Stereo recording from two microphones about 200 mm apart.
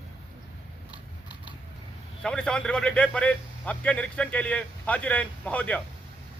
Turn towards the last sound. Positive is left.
turn(degrees=5)  # may be behind; listen again after turning